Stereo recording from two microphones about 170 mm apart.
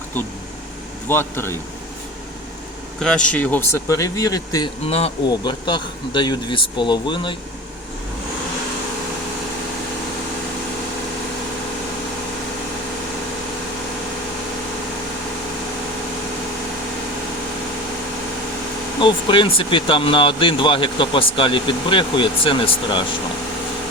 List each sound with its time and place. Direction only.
1.0 s speech: 15° left (ahead or behind)
3.0 s speech: 5° left (ahead or behind); by 4.7 s 20° left (ahead or behind)
4.9 s speech: 35° left (ahead or behind)
18.9 s speech: 30° left (ahead or behind)